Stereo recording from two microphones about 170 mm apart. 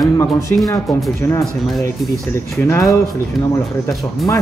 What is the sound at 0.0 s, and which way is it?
Speech, 15° left (ahead or behind).